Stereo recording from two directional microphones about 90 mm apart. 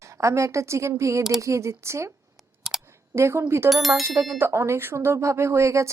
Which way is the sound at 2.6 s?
5° right (ahead or behind).